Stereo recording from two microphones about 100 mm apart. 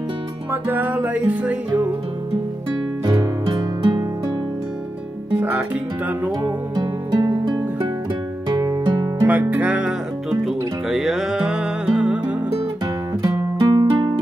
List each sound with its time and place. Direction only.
0.5 s music: 20° right (ahead or behind)
3.1 s music: 50° right (ahead or behind)
5.4 s music: 15° right (ahead or behind)
6.7 s music: 45° right (ahead or behind)
9.2 s music: 15° right (ahead or behind)
10.4 s music: 5° right (ahead or behind)
13.2 s music: 35° right (ahead or behind)